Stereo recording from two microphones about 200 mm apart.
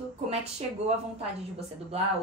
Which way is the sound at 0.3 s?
35° right (ahead or behind).